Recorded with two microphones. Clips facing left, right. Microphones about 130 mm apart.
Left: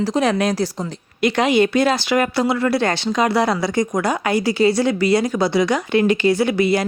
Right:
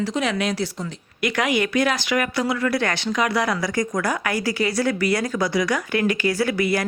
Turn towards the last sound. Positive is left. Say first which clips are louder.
# left 4 dB
turn(degrees=25)  # may be behind; listen again after turning